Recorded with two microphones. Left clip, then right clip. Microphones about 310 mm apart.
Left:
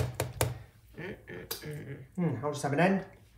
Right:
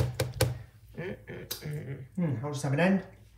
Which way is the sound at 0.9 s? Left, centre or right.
Centre.